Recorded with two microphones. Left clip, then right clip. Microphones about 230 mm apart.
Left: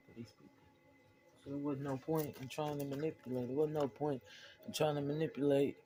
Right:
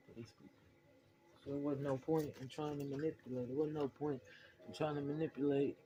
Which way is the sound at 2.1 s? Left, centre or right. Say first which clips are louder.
Left 3 dB; left.